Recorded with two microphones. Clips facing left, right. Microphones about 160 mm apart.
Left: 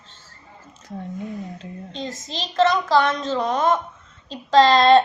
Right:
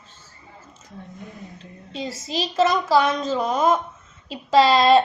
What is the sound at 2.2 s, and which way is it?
A woman's voice, centre (ahead or behind).